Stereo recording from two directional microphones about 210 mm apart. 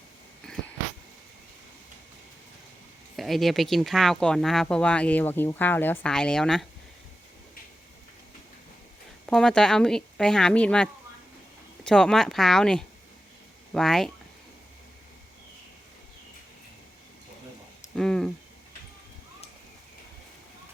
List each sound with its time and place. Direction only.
3.2 s speech: centre (ahead or behind)
9.2 s speech: 5° left (ahead or behind)
17.9 s a sound: 5° left (ahead or behind)